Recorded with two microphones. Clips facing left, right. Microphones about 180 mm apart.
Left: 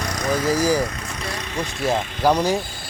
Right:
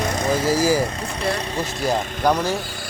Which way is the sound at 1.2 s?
30° right (ahead or behind).